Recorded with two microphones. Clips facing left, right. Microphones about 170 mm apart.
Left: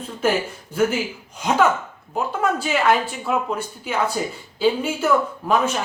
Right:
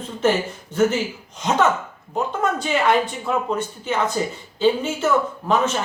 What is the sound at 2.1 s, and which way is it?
Speech, 10° left (ahead or behind).